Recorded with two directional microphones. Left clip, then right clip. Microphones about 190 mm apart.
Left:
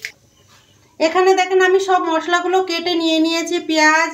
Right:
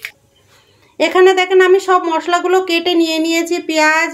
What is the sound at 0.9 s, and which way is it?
Speech, 50° right (ahead or behind).